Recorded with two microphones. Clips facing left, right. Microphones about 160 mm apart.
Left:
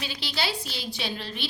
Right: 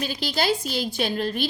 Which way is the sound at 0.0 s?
45° right (ahead or behind).